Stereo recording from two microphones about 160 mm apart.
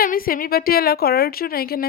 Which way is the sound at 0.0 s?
65° left (ahead or behind).